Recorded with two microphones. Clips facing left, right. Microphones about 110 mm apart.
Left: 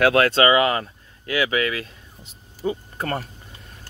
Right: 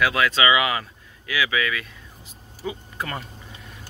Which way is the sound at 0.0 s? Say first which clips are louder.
Left 4 dB; 55° left (ahead or behind).